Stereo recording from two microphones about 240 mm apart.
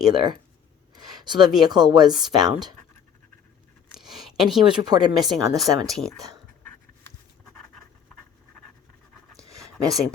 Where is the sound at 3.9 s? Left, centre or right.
Centre.